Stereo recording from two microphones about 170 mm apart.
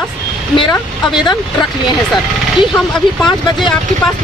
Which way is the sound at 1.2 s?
25° left (ahead or behind).